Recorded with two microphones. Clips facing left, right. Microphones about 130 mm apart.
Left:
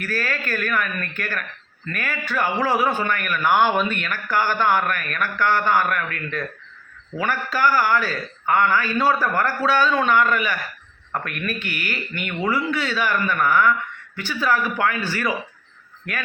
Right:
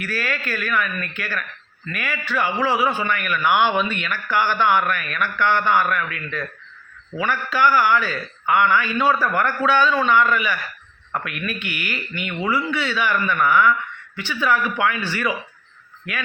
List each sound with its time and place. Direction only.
0.0 s a man's voice: 40° left (ahead or behind)